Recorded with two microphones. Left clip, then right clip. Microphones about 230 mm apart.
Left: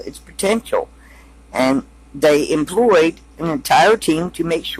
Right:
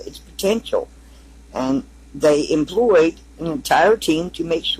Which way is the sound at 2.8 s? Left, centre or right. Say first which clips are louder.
Left 1 dB; left.